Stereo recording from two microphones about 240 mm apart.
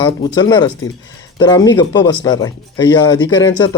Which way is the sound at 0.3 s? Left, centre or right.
Centre.